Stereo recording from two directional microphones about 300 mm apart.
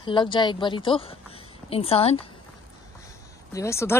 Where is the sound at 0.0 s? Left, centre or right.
Centre.